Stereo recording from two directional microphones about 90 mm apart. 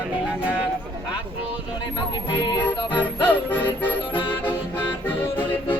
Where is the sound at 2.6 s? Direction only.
20° left (ahead or behind).